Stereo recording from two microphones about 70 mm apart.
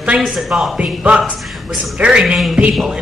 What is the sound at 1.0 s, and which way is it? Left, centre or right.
A man's voice, centre.